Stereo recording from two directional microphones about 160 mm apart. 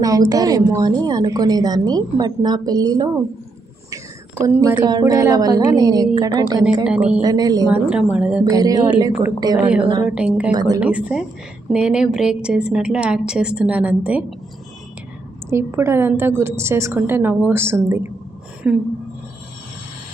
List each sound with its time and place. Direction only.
0.0 s a woman's voice: 20° right (ahead or behind)
3.8 s whispering: 20° right (ahead or behind)
4.8 s a woman's voice: 25° right (ahead or behind)
6.8 s a woman's voice: 10° right (ahead or behind)
7.2 s a woman's voice: 25° right (ahead or behind)
7.7 s a woman's voice: 5° right (ahead or behind)
8.4 s a woman's voice: 25° right (ahead or behind)
10.1 s a woman's voice: 10° right (ahead or behind)
10.5 s a woman's voice: 25° right (ahead or behind)
10.8 s a woman's voice: 10° right (ahead or behind)
15.4 s a woman's voice: 15° right (ahead or behind)